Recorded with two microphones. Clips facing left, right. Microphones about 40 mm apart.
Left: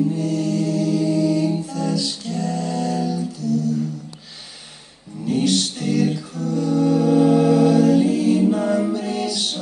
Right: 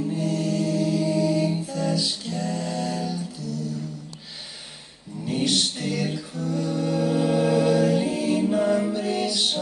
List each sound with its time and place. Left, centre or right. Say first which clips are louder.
0.1 s mantra: left 4 dB; centre
5.2 s music: left 4 dB; centre
8.4 s music: left 3 dB; centre